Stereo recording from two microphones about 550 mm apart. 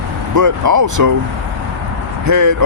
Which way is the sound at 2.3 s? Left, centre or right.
Right.